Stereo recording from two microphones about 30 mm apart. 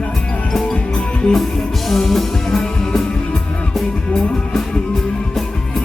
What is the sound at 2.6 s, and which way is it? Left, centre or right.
Music, left.